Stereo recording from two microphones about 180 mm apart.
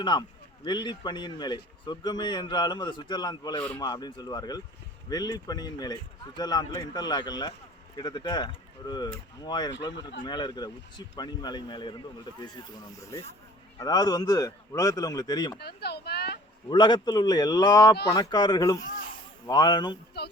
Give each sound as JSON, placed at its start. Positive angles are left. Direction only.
{"t": 0.0, "sound": "a man's voice", "side_deg": 25}
{"t": 13.7, "sound": "a man's voice", "side_deg": 20}
{"t": 15.5, "sound": "speech", "side_deg": 65}
{"t": 16.6, "sound": "a man's voice", "side_deg": 25}